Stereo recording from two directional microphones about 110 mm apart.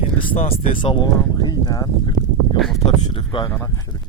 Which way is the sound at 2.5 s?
Centre (ahead or behind).